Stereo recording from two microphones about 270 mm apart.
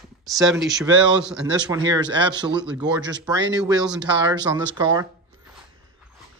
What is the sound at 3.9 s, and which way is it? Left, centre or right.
A man's voice, centre.